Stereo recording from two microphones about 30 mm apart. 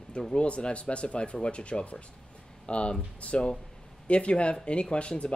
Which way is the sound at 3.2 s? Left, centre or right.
Left.